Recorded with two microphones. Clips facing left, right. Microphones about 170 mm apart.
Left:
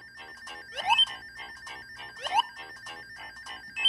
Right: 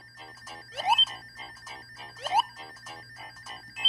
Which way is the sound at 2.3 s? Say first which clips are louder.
Right 2 dB; 30° right (ahead or behind).